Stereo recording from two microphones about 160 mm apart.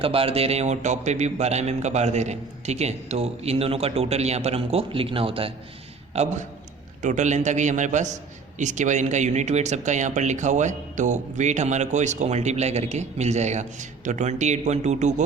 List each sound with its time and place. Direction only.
0.0 s a man's voice: 35° right (ahead or behind)
7.0 s a man's voice: 50° right (ahead or behind)